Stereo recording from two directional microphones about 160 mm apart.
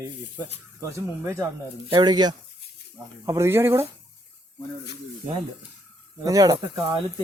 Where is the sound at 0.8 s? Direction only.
15° right (ahead or behind).